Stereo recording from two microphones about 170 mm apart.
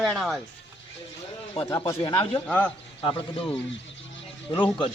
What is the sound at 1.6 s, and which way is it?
Speech, 35° left (ahead or behind).